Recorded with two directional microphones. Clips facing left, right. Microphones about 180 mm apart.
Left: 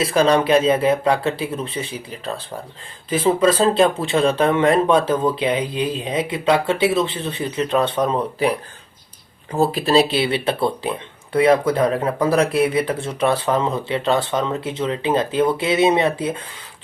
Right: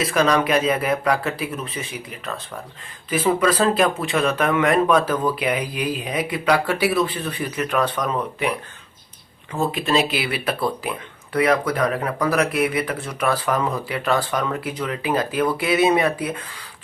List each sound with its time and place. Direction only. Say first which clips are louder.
0.0 s speech: left 3 dB; 30° left (ahead or behind)